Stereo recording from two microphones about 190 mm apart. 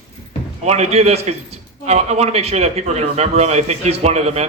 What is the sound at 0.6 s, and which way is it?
A man's voice, 35° right (ahead or behind).